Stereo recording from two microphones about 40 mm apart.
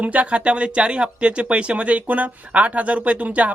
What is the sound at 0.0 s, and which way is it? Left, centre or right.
A man's voice, right.